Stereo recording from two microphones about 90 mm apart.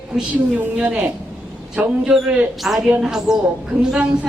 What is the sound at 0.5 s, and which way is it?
Speech, 15° right (ahead or behind).